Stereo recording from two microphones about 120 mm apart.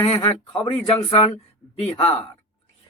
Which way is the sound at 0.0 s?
50° left (ahead or behind).